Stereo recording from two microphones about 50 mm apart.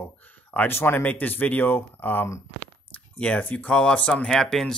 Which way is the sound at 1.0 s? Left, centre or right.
Left.